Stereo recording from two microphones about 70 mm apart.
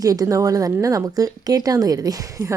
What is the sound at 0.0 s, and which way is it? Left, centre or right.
A woman's voice, right.